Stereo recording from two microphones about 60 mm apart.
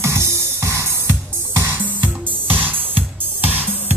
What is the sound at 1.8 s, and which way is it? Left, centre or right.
Music, right.